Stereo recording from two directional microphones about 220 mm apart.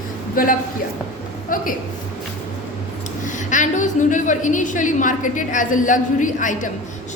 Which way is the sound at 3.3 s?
35° left (ahead or behind).